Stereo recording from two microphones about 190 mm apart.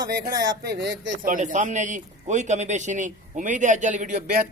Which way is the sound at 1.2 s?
45° right (ahead or behind).